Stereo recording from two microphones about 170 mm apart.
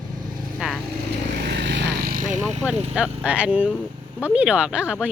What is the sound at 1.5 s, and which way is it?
Vehicle, 80° right.